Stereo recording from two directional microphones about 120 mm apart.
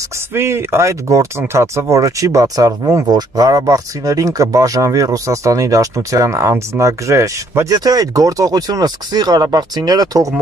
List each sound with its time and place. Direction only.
0.3 s speech: 20° right (ahead or behind)